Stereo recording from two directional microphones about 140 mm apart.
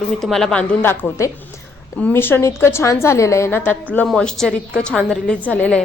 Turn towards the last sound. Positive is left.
turn(degrees=10)  # may be behind; listen again after turning